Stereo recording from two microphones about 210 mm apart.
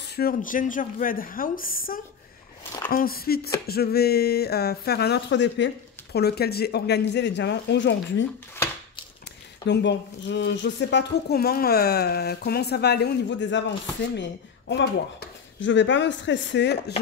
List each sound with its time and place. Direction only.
0.0 s speech: 50° left (ahead or behind)
9.7 s speech: 55° left (ahead or behind)